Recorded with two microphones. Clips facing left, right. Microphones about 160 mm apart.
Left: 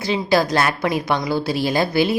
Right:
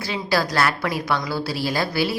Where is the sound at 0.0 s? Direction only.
20° left (ahead or behind).